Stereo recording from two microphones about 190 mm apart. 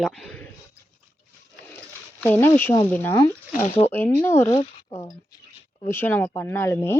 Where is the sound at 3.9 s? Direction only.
10° left (ahead or behind).